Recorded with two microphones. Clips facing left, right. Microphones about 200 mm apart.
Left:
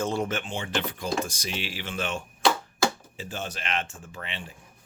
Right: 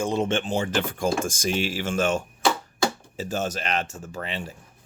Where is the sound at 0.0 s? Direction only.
20° right (ahead or behind); by 4.5 s 40° right (ahead or behind).